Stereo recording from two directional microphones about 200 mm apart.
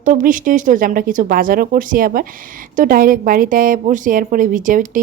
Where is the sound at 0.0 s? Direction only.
40° right (ahead or behind).